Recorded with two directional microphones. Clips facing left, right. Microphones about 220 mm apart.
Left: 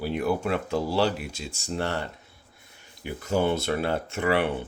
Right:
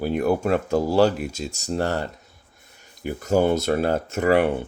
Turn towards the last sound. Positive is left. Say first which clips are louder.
# right 6 dB
turn(degrees=-45)  # may be behind; listen again after turning